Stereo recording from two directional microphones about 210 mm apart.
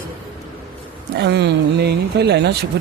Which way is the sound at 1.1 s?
55° right (ahead or behind).